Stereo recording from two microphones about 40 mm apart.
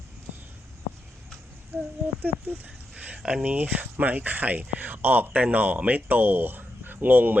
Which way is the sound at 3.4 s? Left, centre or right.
Right.